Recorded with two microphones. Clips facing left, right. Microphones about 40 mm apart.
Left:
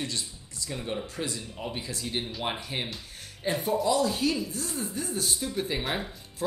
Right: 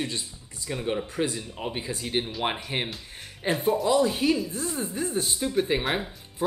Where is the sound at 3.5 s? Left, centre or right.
Right.